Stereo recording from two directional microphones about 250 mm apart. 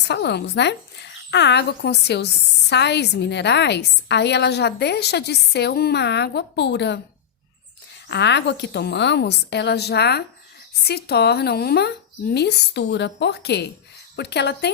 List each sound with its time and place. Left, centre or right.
0.0 s speech: left
8.1 s speech: left